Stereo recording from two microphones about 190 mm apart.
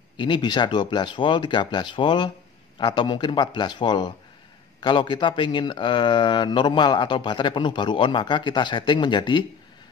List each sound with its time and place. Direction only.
0.2 s speech: 25° left (ahead or behind)